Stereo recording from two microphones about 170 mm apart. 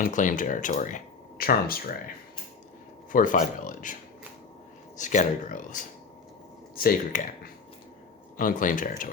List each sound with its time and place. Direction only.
0.0 s speech: 50° left (ahead or behind)
3.1 s speech: 50° left (ahead or behind)
4.9 s speech: 50° left (ahead or behind)